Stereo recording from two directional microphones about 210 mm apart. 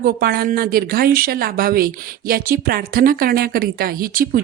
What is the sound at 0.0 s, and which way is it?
A woman's voice, 45° right (ahead or behind).